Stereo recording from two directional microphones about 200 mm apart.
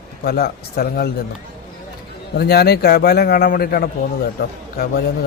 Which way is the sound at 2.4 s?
50° left (ahead or behind).